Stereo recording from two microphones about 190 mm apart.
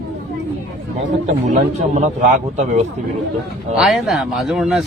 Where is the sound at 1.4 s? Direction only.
40° right (ahead or behind).